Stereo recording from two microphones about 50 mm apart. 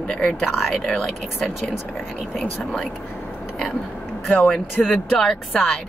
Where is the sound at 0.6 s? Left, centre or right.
Centre.